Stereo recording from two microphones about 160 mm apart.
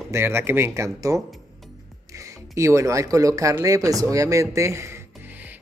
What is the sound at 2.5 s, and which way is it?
Speech, 20° right (ahead or behind).